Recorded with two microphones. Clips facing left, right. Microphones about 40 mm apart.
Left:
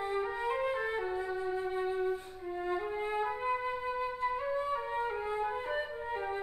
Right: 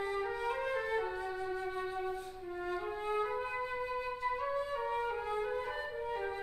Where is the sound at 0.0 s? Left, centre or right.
Left.